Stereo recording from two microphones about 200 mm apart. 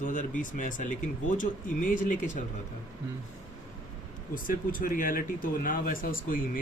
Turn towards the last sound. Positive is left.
turn(degrees=45)  # may be behind; listen again after turning